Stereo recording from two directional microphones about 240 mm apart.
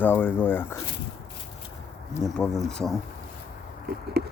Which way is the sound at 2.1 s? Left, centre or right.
Centre.